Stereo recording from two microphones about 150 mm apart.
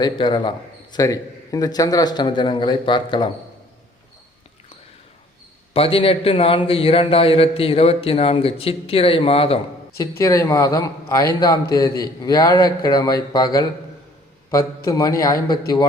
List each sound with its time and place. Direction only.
0.0 s a man's voice: 30° left (ahead or behind)
5.7 s a man's voice: 40° left (ahead or behind)
10.0 s a man's voice: 20° left (ahead or behind)
14.8 s a man's voice: 25° left (ahead or behind)